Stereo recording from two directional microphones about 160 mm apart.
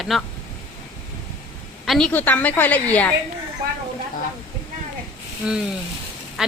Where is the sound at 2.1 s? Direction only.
10° left (ahead or behind).